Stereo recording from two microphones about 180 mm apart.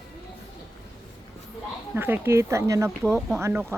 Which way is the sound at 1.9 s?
10° right (ahead or behind).